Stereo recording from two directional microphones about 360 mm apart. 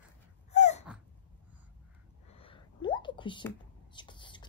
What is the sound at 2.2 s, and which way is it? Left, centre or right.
Whispering, centre.